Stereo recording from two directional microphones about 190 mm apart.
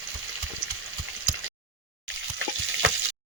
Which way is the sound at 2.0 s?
85° right.